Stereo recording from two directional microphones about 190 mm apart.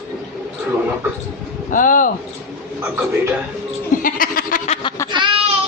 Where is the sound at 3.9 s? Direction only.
45° left (ahead or behind).